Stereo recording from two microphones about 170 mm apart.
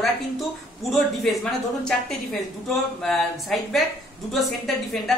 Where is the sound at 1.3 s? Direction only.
Centre (ahead or behind).